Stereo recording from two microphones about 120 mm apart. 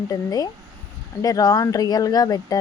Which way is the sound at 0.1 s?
35° left (ahead or behind).